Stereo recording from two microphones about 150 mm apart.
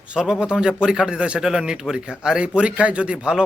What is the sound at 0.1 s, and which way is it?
A man's voice, 5° right (ahead or behind).